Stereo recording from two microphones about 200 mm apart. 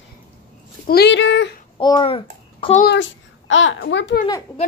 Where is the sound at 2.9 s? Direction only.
70° left (ahead or behind).